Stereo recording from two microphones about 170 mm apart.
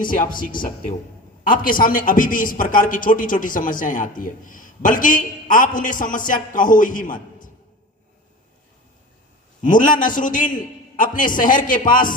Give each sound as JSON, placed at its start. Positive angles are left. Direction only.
{"t": 0.0, "sound": "a man's voice", "side_deg": 50}
{"t": 9.6, "sound": "a man's voice", "side_deg": 50}